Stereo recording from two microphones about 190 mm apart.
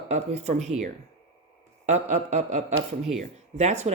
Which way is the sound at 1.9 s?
35° right (ahead or behind).